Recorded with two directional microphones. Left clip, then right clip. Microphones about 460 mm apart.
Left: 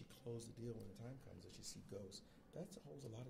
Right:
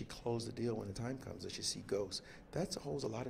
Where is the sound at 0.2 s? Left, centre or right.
Right.